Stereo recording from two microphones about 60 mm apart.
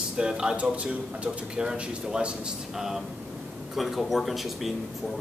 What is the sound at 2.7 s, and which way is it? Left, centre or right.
A man's voice, centre.